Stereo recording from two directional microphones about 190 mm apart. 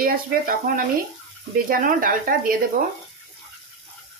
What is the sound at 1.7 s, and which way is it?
Speech, 45° right (ahead or behind).